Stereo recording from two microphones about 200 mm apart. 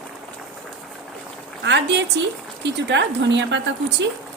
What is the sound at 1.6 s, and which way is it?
A woman's voice, 60° right (ahead or behind).